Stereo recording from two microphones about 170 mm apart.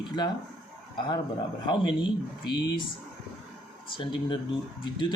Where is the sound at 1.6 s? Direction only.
25° left (ahead or behind).